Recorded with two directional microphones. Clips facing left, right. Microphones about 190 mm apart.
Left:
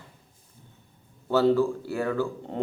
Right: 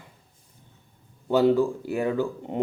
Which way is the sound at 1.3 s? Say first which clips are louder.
Right 1 dB; 15° right (ahead or behind).